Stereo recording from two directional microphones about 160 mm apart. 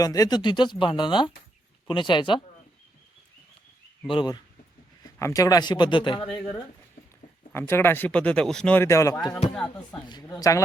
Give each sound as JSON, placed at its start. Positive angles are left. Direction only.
{"t": 0.0, "sound": "speech", "side_deg": 25}
{"t": 4.1, "sound": "speech", "side_deg": 30}
{"t": 7.5, "sound": "speech", "side_deg": 15}